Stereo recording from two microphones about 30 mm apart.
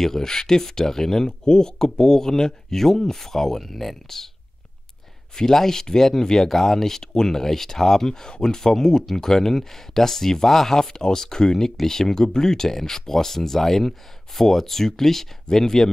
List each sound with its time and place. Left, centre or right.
0.0 s speech: centre
5.3 s speech: centre